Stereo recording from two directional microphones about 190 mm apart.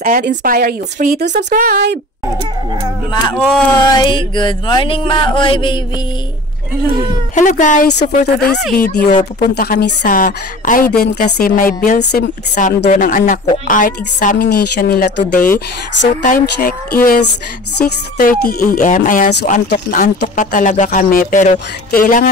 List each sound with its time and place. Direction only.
0.0 s a sound: 45° right (ahead or behind)
0.4 s speech: 50° right (ahead or behind)
3.3 s speech: centre (ahead or behind)
3.8 s a sound: 25° left (ahead or behind)
7.3 s speech: 40° left (ahead or behind)
8.1 s speech: 50° left (ahead or behind)
12.6 s speech: 45° left (ahead or behind)
15.3 s speech: 10° left (ahead or behind)
16.3 s speech: 50° left (ahead or behind)